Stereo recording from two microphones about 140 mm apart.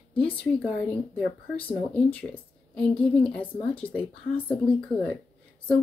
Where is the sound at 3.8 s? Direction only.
10° left (ahead or behind).